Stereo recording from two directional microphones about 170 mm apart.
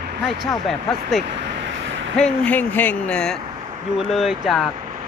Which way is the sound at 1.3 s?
90° right.